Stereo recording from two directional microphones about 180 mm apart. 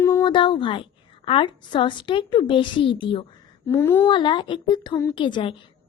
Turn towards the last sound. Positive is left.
turn(degrees=25)  # may be behind; listen again after turning